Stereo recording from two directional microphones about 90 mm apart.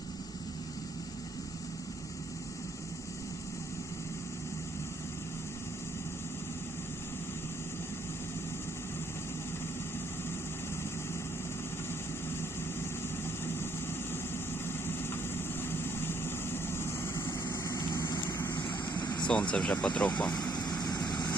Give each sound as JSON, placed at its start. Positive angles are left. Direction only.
{"t": 13.4, "sound": "vehicle", "side_deg": 25}
{"t": 14.8, "sound": "vehicle", "side_deg": 25}
{"t": 19.3, "sound": "speech", "side_deg": 15}
{"t": 20.4, "sound": "vehicle", "side_deg": 45}